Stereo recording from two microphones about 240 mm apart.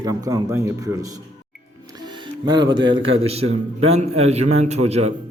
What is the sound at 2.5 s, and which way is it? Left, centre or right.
A man's voice, centre.